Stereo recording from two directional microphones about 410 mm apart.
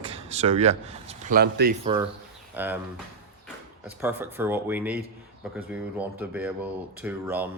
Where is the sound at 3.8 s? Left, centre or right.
Centre.